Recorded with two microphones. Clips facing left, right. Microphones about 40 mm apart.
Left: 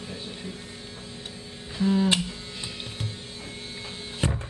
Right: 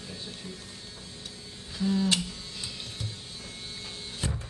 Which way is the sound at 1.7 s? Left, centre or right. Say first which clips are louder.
Left 4 dB; left.